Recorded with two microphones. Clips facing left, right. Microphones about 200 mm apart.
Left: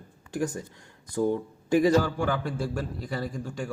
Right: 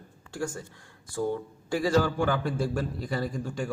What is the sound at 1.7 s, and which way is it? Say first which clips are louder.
Speech: left 6 dB; 20° left (ahead or behind).